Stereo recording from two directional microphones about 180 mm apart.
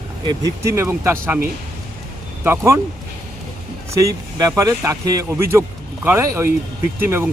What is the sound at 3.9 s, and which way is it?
Speech, 20° right (ahead or behind).